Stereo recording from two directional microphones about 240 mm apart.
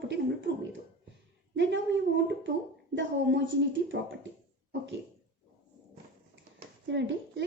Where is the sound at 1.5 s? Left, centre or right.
Right.